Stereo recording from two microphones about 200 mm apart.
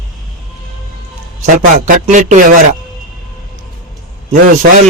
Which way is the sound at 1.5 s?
40° right (ahead or behind).